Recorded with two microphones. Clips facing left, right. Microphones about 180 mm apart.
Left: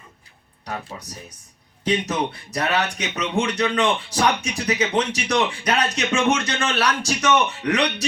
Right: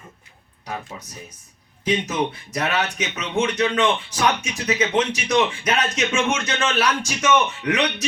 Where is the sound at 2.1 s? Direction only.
35° left (ahead or behind).